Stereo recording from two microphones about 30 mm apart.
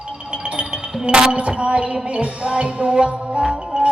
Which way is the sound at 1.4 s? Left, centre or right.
Right.